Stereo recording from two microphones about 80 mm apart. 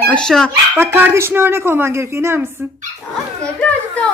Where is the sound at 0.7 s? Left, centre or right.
Right.